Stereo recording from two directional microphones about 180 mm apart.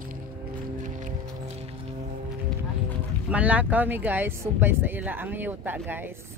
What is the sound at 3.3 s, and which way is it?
Speech, 10° right (ahead or behind).